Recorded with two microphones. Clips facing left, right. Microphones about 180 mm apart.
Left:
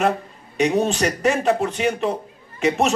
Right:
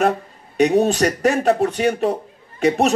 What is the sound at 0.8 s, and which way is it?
A man's voice, 40° right (ahead or behind).